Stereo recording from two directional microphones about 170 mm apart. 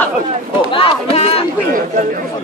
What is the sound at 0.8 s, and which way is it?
Speech, 35° left (ahead or behind).